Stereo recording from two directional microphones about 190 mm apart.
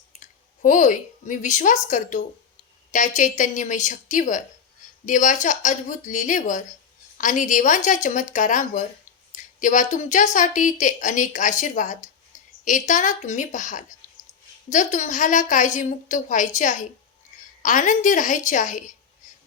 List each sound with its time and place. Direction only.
0.2 s a woman's voice: 40° left (ahead or behind)